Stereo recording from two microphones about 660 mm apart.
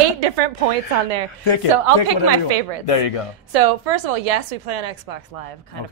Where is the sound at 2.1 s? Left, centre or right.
Right.